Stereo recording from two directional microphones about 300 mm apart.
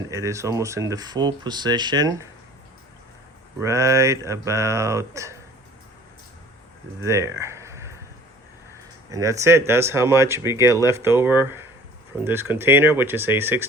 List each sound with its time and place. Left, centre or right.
0.1 s speech: centre
3.6 s speech: centre
7.0 s speech: centre
9.0 s speech: centre